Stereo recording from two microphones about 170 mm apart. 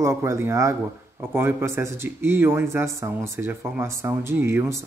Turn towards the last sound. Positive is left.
turn(degrees=-15)  # may be behind; listen again after turning